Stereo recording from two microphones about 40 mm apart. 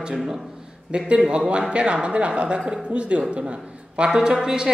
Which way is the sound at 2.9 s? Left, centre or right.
Right.